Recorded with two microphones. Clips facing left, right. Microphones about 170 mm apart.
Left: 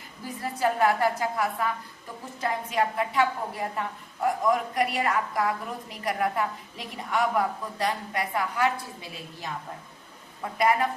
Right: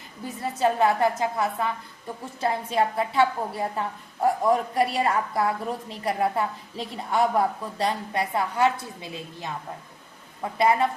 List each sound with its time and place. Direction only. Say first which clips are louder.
0.6 s a woman's voice: right 2 dB; 25° right (ahead or behind)